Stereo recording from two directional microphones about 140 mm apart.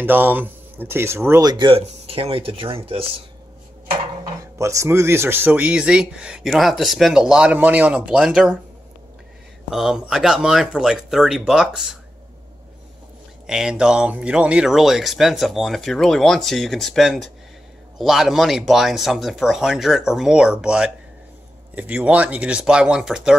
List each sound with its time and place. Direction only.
0.0 s speech: 15° right (ahead or behind)
1.5 s speech: 35° right (ahead or behind)
1.8 s speech: 45° right (ahead or behind)
4.6 s speech: 20° right (ahead or behind); by 8.5 s 5° right (ahead or behind)
9.7 s speech: 5° right (ahead or behind)
13.5 s speech: 5° right (ahead or behind)